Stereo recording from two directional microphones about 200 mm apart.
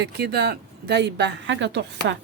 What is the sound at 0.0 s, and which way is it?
A woman's voice, 55° right (ahead or behind).